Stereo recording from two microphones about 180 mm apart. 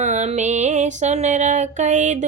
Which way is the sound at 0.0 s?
40° right (ahead or behind).